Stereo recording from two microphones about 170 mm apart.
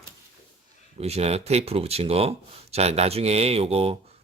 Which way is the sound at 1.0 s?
40° right (ahead or behind).